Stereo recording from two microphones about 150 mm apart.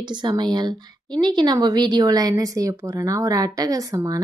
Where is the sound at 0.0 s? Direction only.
30° right (ahead or behind).